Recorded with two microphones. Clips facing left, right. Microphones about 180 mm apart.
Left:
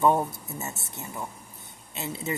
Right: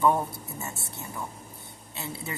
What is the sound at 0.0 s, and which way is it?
Speech, 20° left (ahead or behind).